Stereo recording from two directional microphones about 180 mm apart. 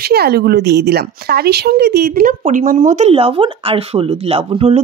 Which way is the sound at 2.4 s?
45° right (ahead or behind).